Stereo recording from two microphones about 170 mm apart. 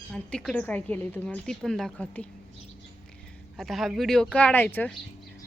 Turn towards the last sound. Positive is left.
turn(degrees=10)  # may be behind; listen again after turning